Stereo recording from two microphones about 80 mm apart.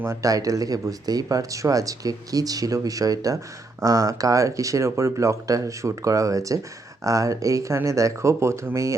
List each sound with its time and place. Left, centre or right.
0.2 s speech: right